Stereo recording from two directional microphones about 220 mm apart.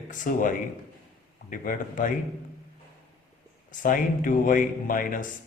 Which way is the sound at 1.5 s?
40° left (ahead or behind).